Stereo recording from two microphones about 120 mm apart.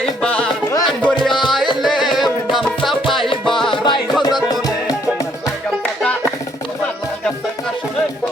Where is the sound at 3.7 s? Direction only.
40° left (ahead or behind).